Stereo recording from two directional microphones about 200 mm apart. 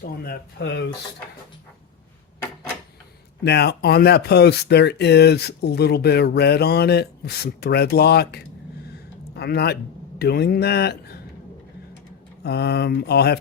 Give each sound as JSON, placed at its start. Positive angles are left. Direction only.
{"t": 0.0, "sound": "speech", "side_deg": 50}
{"t": 3.4, "sound": "speech", "side_deg": 55}
{"t": 12.4, "sound": "speech", "side_deg": 55}